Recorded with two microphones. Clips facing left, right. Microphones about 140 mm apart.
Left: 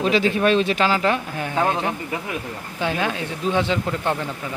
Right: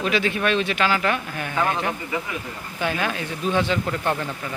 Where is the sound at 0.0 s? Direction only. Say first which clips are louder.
Left 4 dB; 35° left (ahead or behind); by 4.3 s 15° left (ahead or behind).